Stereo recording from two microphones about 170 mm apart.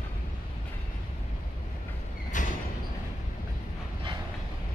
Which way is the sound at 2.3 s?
50° left (ahead or behind).